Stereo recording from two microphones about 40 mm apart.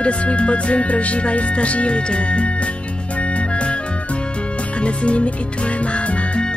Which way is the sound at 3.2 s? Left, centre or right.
Left.